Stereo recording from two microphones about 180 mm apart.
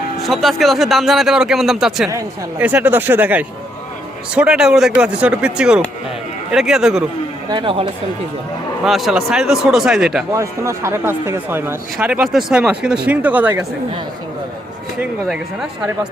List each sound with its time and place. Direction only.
0.2 s a man's voice: centre (ahead or behind)
2.0 s a man's voice: 15° right (ahead or behind)
7.5 s speech: 30° right (ahead or behind)
8.8 s a man's voice: centre (ahead or behind)
10.3 s speech: 15° right (ahead or behind)
15.3 s a man's voice: 5° right (ahead or behind)